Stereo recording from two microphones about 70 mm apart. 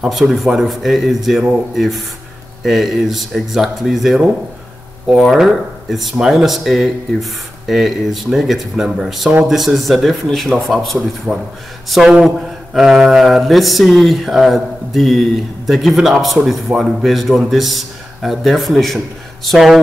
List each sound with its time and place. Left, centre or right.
0.0 s speech: centre
5.3 s speech: centre
11.3 s a man's voice: right
11.9 s speech: centre